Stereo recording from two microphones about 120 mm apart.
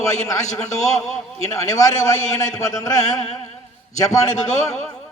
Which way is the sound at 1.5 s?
25° left (ahead or behind).